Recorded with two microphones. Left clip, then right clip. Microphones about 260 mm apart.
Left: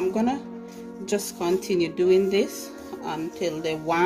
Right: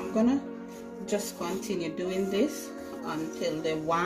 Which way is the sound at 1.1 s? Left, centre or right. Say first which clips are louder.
Left 7 dB; left.